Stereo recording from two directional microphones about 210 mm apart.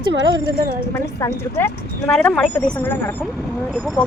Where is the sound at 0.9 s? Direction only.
15° left (ahead or behind).